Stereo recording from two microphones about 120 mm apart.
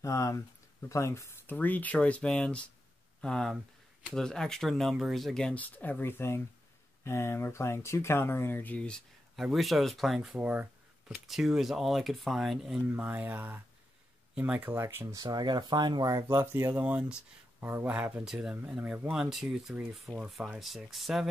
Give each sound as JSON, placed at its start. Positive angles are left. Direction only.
{"t": 0.0, "sound": "speech", "side_deg": 25}
{"t": 10.4, "sound": "a sound", "side_deg": -10}
{"t": 11.2, "sound": "speech", "side_deg": 0}
{"t": 12.8, "sound": "speech", "side_deg": -15}
{"t": 15.1, "sound": "speech", "side_deg": -35}